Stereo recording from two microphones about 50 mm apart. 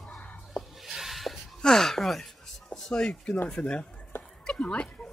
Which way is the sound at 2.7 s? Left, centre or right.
Centre.